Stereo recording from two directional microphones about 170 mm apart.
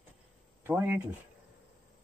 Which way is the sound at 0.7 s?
10° right (ahead or behind).